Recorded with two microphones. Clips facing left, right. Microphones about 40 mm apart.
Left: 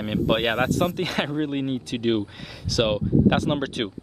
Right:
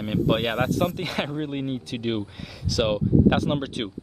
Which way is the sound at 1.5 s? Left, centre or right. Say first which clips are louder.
Left 3 dB; centre.